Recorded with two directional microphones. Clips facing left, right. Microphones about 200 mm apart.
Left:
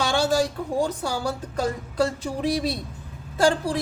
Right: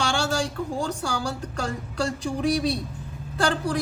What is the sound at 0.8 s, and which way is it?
A woman's voice, 20° left (ahead or behind).